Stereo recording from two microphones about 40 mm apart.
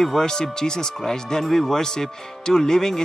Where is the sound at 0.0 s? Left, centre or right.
Centre.